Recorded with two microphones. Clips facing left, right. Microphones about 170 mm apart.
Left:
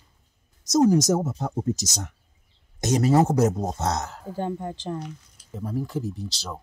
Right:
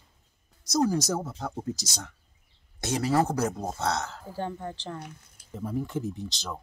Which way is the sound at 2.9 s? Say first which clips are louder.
Left 6 dB; 20° left (ahead or behind).